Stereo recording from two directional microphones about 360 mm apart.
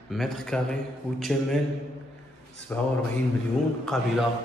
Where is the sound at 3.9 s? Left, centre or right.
Centre.